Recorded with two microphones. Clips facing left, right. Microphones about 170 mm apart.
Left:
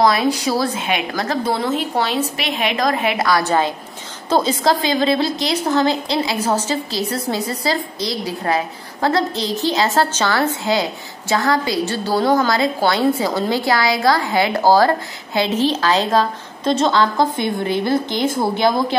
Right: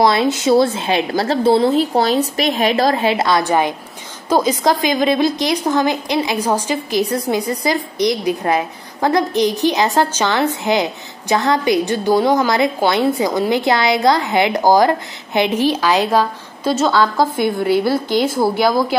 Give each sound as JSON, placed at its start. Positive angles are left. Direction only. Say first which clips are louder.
{"t": 0.0, "sound": "a woman's voice", "louder": "right 2 dB", "side_deg": -25}